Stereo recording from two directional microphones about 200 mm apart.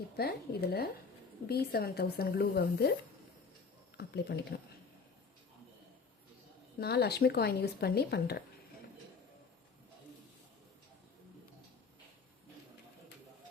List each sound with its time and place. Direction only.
0.2 s speech: 50° left (ahead or behind)
3.9 s speech: 50° left (ahead or behind)
6.7 s speech: 55° left (ahead or behind)